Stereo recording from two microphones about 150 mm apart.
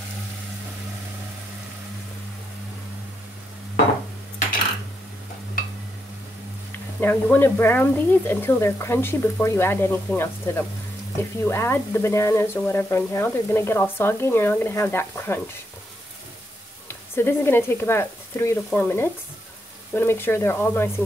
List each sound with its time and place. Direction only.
6.7 s frying: 15° left (ahead or behind)
16.8 s speech: 15° left (ahead or behind)
18.7 s frying: 15° left (ahead or behind)